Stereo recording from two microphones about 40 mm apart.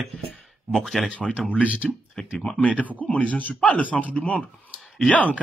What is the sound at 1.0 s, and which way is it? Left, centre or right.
Speech, left.